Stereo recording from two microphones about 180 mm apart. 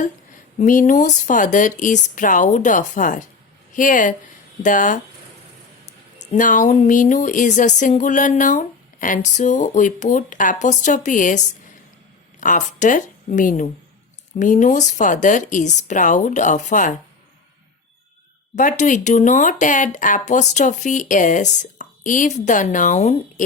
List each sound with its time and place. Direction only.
0.6 s speech: 45° left (ahead or behind)
6.1 s a woman's voice: 45° left (ahead or behind)
18.5 s speech: 45° left (ahead or behind)